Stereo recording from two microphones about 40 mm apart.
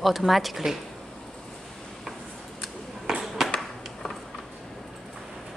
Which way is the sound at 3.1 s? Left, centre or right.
Centre.